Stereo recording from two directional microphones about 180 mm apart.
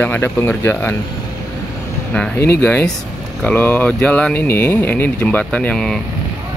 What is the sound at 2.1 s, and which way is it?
Speech, 10° left (ahead or behind).